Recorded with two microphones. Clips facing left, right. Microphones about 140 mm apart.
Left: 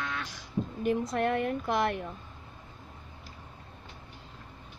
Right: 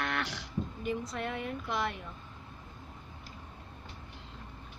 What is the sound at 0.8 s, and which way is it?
Speech, 55° left (ahead or behind).